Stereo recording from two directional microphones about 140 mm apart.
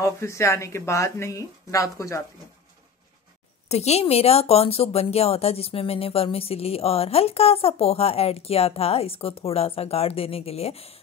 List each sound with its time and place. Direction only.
0.0 s speech: 20° left (ahead or behind)
3.6 s speech: 50° left (ahead or behind)